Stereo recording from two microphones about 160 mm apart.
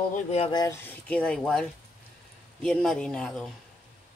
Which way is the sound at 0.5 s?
25° left (ahead or behind).